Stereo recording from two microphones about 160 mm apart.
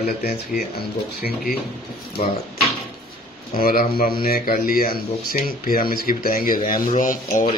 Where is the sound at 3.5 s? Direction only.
65° left (ahead or behind).